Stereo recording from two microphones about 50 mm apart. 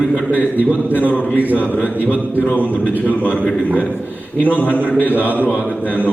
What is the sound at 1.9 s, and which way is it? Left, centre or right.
Speech, right.